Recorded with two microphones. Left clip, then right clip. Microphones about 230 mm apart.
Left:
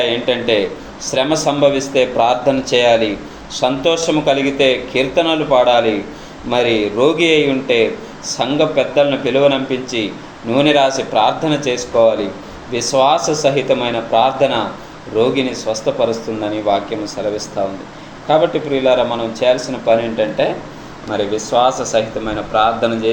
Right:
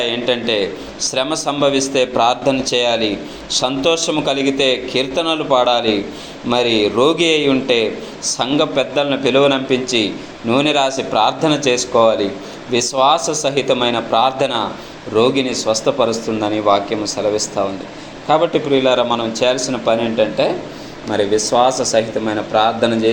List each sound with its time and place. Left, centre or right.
0.0 s a man's voice: right